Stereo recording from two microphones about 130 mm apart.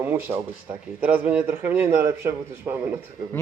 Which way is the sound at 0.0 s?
15° right (ahead or behind).